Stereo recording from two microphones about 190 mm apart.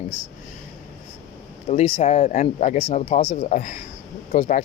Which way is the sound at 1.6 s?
35° left (ahead or behind).